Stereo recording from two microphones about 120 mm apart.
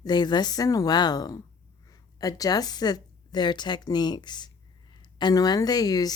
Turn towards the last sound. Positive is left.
turn(degrees=30)  # may be behind; listen again after turning